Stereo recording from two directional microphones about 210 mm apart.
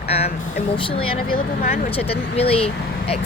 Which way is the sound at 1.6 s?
45° left (ahead or behind).